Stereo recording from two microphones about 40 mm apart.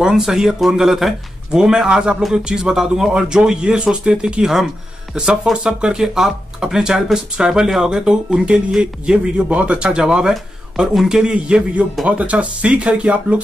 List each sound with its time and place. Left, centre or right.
0.0 s speech: centre
1.5 s speech: centre
5.9 s speech: centre
12.1 s speech: right